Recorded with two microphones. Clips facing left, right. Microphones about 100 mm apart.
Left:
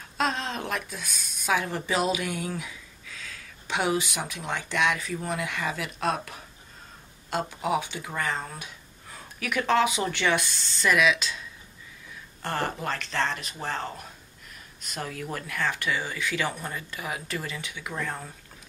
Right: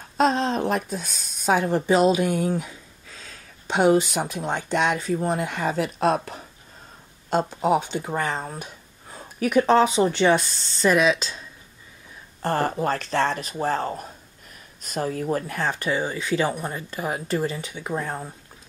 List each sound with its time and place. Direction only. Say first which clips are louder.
0.2 s speech: right 8 dB; 35° right (ahead or behind)